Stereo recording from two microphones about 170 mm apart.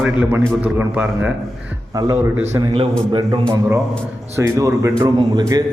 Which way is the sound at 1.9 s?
20° right (ahead or behind).